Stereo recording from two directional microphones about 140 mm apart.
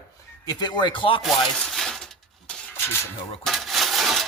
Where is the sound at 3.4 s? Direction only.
Centre (ahead or behind).